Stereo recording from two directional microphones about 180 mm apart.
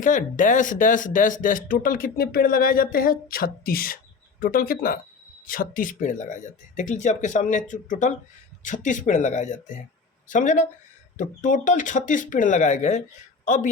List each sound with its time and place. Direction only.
0.0 s a woman's voice: 45° left (ahead or behind)